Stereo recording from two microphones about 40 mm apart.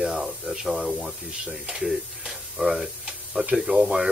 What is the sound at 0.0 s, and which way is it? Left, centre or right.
Speech, centre.